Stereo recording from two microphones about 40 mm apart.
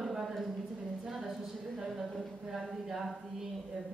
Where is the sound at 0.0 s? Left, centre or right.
Centre.